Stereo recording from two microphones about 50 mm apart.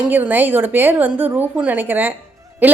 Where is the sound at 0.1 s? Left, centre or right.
Right.